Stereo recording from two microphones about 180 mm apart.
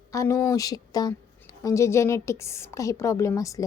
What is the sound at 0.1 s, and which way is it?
A woman's voice, 15° left (ahead or behind).